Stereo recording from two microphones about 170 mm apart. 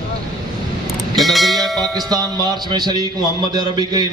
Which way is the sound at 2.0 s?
25° right (ahead or behind).